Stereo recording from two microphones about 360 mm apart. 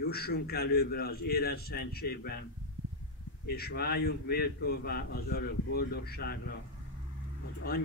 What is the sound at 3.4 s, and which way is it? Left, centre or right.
A man's voice, left.